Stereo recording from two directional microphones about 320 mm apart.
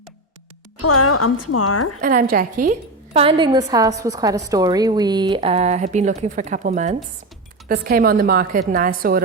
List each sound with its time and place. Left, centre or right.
0.8 s speech: left
2.0 s a woman's voice: right